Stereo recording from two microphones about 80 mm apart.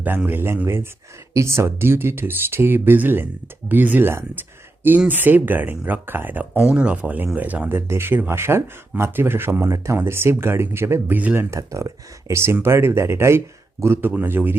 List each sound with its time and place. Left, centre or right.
0.3 s speech: right
7.8 s speech: right